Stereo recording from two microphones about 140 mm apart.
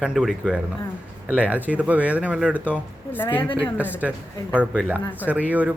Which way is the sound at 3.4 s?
35° left (ahead or behind).